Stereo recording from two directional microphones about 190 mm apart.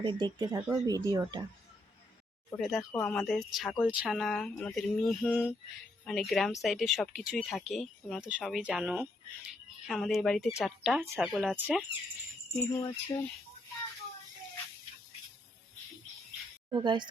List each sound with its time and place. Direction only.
0.0 s speech: 25° right (ahead or behind)
2.6 s speech: centre (ahead or behind)
12.5 s wind chime: 20° left (ahead or behind)
16.7 s speech: 25° right (ahead or behind)